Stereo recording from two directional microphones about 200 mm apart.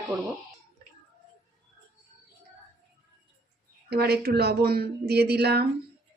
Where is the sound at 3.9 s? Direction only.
50° right (ahead or behind).